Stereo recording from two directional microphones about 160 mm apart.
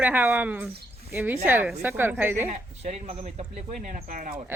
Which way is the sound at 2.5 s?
45° right (ahead or behind).